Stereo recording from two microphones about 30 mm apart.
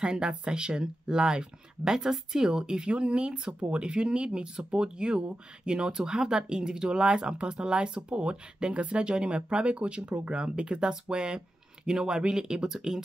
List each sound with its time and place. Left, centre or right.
0.0 s speech: right
1.9 s speech: centre
2.9 s speech: right; by 13.0 s centre